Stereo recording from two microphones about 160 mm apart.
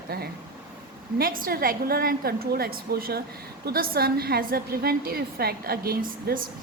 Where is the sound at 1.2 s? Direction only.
65° right (ahead or behind).